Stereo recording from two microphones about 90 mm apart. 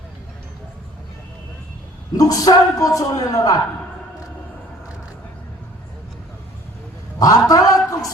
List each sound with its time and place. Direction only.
2.1 s a man's voice: 40° left (ahead or behind)
7.2 s a man's voice: 40° left (ahead or behind)